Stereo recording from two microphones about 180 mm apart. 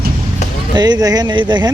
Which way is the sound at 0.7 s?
25° right (ahead or behind).